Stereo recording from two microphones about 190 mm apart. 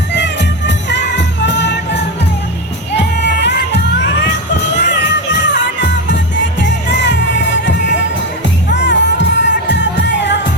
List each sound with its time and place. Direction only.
0.7 s music: 65° left (ahead or behind)
8.7 s music: 65° left (ahead or behind)